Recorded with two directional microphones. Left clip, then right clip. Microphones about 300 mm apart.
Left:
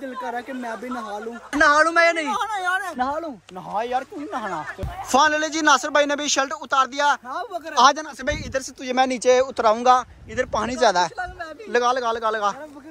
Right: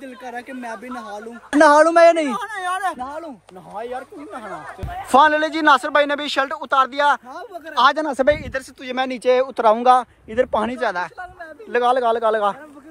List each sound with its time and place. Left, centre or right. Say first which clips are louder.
0.2 s speech: left 2 dB; centre
1.6 s a woman's voice: right 5 dB; centre
2.3 s speech: left 1 dB; centre
3.0 s speech: left 6 dB; left
3.7 s speech: left 5 dB; left
4.5 s a woman's voice: left 2 dB; centre
5.1 s speech: right 4 dB; centre
10.8 s speech: left 4 dB; centre
11.7 s speech: right 3 dB; centre